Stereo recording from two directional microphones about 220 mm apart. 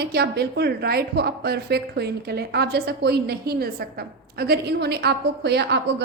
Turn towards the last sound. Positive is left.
turn(degrees=-50)  # may be behind; listen again after turning